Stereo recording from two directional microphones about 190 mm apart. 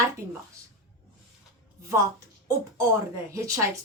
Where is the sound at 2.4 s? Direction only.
15° right (ahead or behind).